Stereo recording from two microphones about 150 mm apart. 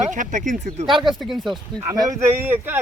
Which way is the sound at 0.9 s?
Centre (ahead or behind).